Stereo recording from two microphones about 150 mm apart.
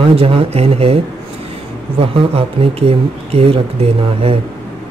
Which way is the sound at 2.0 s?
40° right (ahead or behind).